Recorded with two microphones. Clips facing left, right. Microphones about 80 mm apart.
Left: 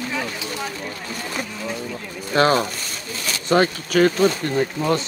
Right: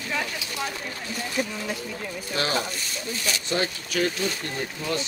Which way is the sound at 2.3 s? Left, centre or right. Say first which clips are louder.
Left 10 dB; left.